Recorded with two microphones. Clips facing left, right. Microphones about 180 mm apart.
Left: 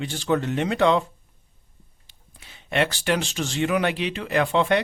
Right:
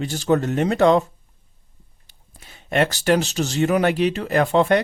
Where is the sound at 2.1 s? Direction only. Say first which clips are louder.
Right 3 dB; 40° right (ahead or behind).